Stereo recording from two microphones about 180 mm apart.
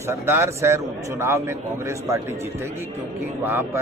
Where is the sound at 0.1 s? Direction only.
15° right (ahead or behind).